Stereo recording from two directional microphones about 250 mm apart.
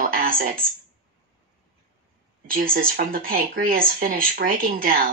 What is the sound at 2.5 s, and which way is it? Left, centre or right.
Speech, right.